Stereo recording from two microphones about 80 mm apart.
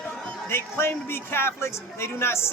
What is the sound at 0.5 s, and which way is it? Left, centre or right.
A man's voice, left.